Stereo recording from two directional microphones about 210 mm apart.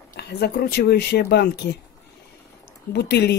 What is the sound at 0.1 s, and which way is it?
Speech, 50° left (ahead or behind).